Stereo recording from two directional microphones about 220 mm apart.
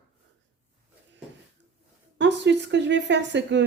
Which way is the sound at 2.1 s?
55° right (ahead or behind).